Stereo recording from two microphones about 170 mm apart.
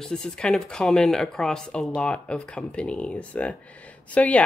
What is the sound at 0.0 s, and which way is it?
Speech, 5° left (ahead or behind).